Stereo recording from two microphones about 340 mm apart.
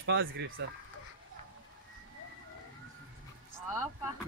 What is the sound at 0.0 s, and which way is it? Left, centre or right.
Speech, right.